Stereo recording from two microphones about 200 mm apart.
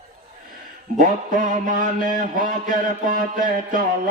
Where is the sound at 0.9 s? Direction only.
40° right (ahead or behind).